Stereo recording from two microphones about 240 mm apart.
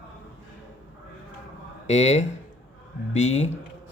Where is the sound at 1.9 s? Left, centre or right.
Left.